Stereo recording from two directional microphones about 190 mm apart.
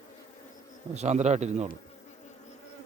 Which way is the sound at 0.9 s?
35° right (ahead or behind).